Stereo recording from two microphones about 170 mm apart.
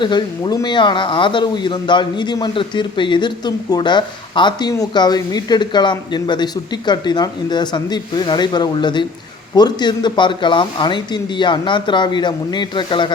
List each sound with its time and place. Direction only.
0.0 s speech: 25° left (ahead or behind)